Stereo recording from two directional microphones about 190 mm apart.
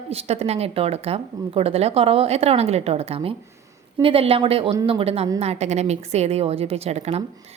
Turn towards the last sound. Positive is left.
turn(degrees=-35)  # may be behind; listen again after turning